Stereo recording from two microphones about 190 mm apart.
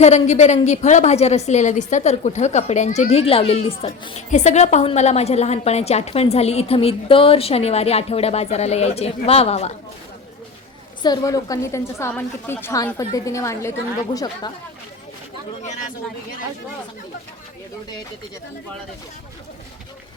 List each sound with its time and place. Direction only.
0.0 s a woman's voice: 35° left (ahead or behind)
11.0 s a woman's voice: 20° left (ahead or behind)
15.6 s a woman's voice: 40° left (ahead or behind)